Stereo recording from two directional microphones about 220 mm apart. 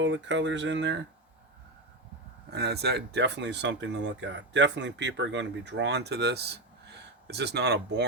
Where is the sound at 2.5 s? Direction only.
50° right (ahead or behind).